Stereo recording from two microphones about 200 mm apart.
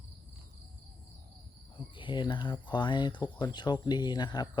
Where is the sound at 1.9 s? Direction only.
25° left (ahead or behind).